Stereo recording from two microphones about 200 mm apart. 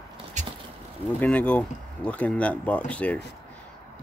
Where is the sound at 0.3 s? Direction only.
35° right (ahead or behind).